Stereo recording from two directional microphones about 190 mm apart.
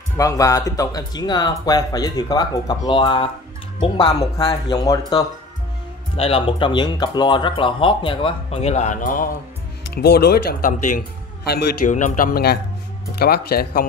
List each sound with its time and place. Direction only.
0.2 s speech: 15° left (ahead or behind)
6.1 s speech: 30° left (ahead or behind); by 13.8 s 55° left (ahead or behind)